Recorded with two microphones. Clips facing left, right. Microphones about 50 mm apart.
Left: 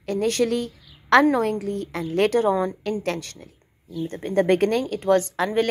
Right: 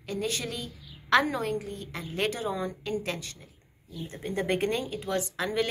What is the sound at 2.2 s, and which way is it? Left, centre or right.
A woman's voice, left.